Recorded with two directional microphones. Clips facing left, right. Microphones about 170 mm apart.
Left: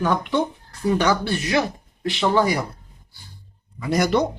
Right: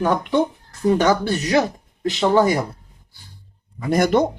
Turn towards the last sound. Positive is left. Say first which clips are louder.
# right 3 dB
turn(degrees=-50)  # may be behind; listen again after turning